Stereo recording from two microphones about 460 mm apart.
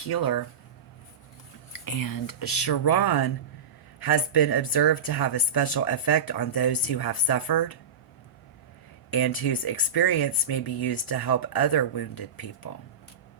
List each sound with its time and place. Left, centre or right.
0.1 s speech: left
1.7 s speech: left
9.0 s speech: left